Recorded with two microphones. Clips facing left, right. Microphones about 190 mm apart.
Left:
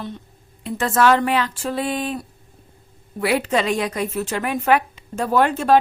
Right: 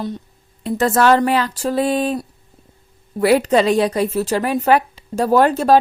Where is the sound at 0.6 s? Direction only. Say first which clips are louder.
Right 3 dB; 40° right (ahead or behind).